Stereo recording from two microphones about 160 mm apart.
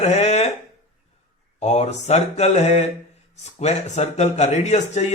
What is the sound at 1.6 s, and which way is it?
A man's voice, 45° left (ahead or behind).